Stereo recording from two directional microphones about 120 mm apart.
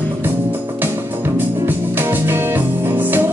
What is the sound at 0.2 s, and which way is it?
Music, 15° right (ahead or behind).